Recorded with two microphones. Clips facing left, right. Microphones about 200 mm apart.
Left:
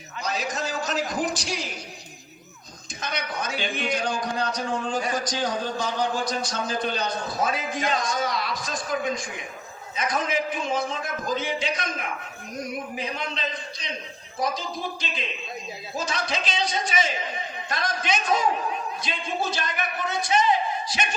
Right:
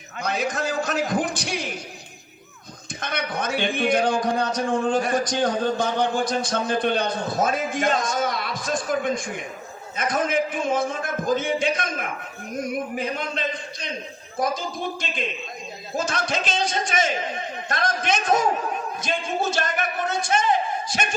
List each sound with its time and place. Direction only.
0.2 s a man's voice: 55° right (ahead or behind)
3.0 s a man's voice: 55° right (ahead or behind)
15.0 s a man's voice: 50° right (ahead or behind)